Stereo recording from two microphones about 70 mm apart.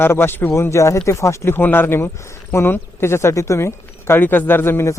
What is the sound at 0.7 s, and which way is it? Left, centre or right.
Speech, left.